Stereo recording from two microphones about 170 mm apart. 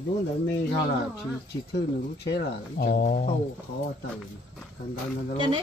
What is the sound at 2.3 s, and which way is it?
Speech, 60° left (ahead or behind).